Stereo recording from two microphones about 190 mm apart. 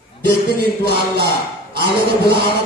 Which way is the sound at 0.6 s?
60° right (ahead or behind).